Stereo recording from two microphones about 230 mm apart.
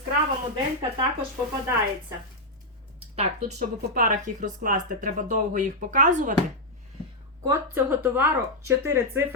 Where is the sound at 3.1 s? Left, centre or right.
Right.